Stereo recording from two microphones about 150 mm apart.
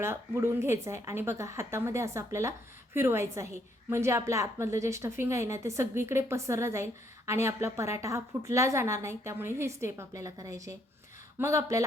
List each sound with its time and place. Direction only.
0.0 s a woman's voice: 15° right (ahead or behind)